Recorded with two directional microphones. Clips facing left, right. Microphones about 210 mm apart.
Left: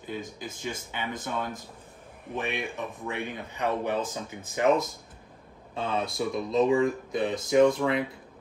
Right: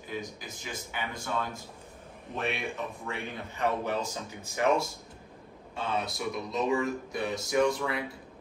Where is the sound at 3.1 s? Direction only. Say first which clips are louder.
Left 3 dB; 15° left (ahead or behind).